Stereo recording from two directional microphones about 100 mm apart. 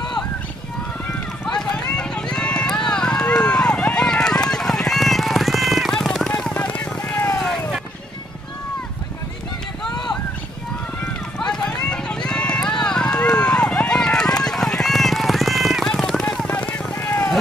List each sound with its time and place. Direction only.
1.4 s run: 5° left (ahead or behind)
11.3 s run: 5° left (ahead or behind)
16.3 s vehicle: 15° left (ahead or behind)